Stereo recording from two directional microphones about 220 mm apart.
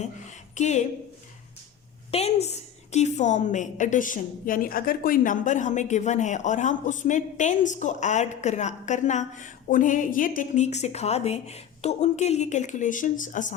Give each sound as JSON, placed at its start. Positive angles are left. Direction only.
{"t": 0.5, "sound": "a woman's voice", "side_deg": 30}
{"t": 2.0, "sound": "a woman's voice", "side_deg": 30}